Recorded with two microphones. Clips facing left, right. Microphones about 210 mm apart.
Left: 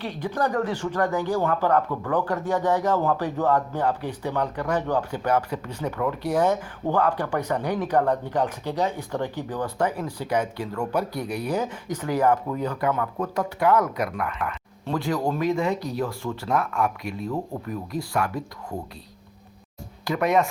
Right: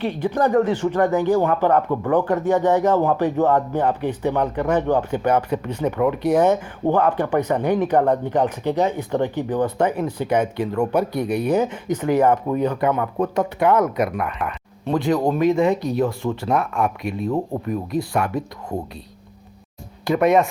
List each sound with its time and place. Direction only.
0.0 s speech: 20° right (ahead or behind)
20.1 s speech: 25° right (ahead or behind)